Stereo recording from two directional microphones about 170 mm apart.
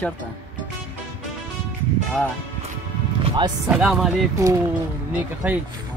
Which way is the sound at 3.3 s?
25° right (ahead or behind).